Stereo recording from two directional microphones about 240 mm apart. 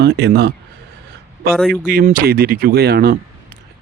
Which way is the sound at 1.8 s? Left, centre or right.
Right.